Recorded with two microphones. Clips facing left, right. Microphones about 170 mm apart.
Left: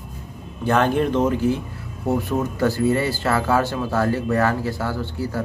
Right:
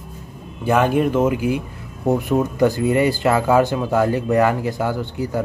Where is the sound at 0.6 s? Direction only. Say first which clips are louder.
Right 2 dB; 10° right (ahead or behind).